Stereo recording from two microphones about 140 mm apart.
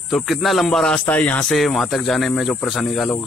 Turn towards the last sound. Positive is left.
turn(degrees=5)  # may be behind; listen again after turning